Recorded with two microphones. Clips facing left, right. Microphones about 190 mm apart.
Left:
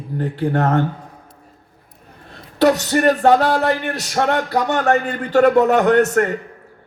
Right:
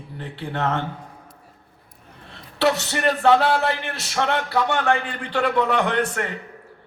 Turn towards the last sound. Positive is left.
turn(degrees=45)  # may be behind; listen again after turning